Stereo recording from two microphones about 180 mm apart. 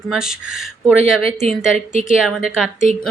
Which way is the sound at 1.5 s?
Centre (ahead or behind).